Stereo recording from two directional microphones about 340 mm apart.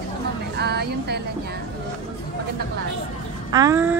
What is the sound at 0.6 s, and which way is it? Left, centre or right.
Speech, right.